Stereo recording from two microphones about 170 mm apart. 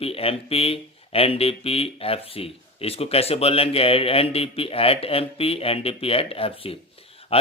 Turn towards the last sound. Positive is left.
turn(degrees=35)  # may be behind; listen again after turning